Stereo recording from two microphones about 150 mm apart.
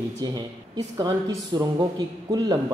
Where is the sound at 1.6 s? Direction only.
30° right (ahead or behind).